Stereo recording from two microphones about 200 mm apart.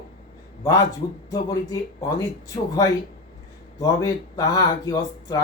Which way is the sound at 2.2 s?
15° left (ahead or behind).